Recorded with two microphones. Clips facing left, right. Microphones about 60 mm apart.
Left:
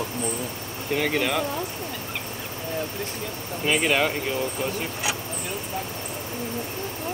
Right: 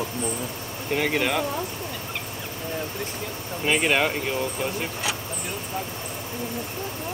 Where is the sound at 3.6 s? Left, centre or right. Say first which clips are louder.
Even; right.